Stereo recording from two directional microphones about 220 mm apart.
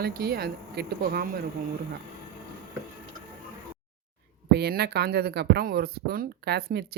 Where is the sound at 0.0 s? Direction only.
45° right (ahead or behind).